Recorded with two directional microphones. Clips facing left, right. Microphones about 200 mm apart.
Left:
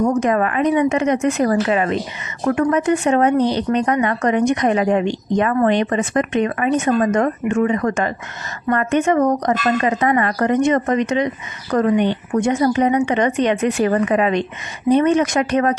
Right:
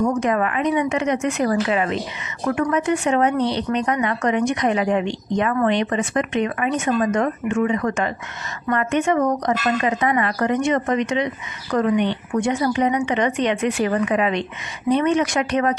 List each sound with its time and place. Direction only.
0.0 s speech: 45° left (ahead or behind)